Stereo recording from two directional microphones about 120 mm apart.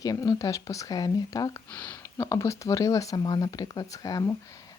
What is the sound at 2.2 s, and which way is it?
Speech, 25° left (ahead or behind).